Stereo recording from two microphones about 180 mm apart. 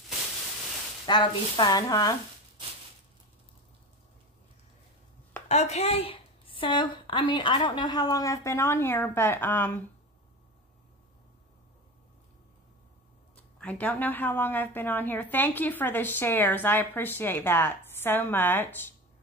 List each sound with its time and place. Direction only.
1.0 s a woman's voice: 25° left (ahead or behind)
5.5 s a woman's voice: 35° left (ahead or behind); by 9.8 s 10° left (ahead or behind)
13.6 s a woman's voice: 10° left (ahead or behind)